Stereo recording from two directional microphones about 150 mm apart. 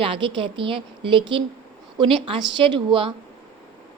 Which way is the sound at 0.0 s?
35° right (ahead or behind).